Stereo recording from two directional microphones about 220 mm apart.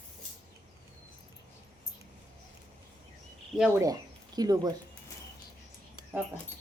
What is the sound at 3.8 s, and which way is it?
Speech, 15° right (ahead or behind).